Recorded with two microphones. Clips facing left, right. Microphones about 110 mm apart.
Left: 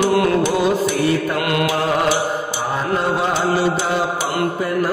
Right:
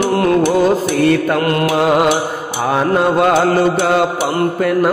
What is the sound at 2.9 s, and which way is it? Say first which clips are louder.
Music: right 7 dB; 65° right (ahead or behind).